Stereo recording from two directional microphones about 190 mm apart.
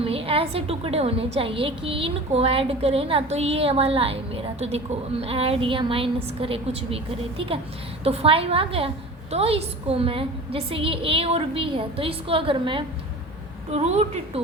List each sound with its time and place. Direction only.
0.0 s a woman's voice: 30° right (ahead or behind)
5.2 s a woman's voice: 30° right (ahead or behind)